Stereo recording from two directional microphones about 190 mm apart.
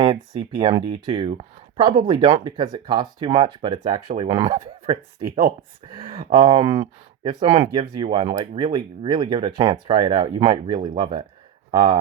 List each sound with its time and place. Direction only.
0.0 s speech: 25° right (ahead or behind)
7.4 s speech: 35° right (ahead or behind)